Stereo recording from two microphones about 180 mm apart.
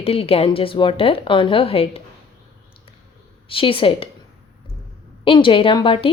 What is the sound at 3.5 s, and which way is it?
Speech, 30° left (ahead or behind).